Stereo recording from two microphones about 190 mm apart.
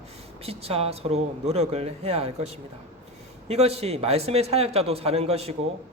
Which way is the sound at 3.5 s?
35° right (ahead or behind).